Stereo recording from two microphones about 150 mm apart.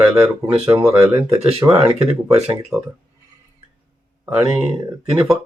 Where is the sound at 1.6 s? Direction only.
20° right (ahead or behind).